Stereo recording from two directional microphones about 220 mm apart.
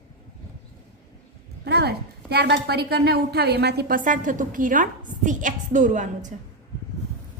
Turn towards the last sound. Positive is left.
turn(degrees=-35)  # may be behind; listen again after turning